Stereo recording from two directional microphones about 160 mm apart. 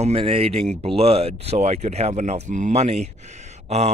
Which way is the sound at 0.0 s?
40° right (ahead or behind).